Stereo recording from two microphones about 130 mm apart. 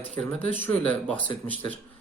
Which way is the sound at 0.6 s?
10° left (ahead or behind).